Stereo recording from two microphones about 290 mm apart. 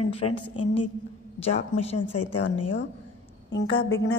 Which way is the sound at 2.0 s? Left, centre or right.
Left.